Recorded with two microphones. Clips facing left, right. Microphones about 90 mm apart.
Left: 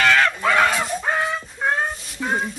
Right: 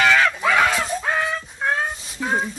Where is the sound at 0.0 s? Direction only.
5° right (ahead or behind).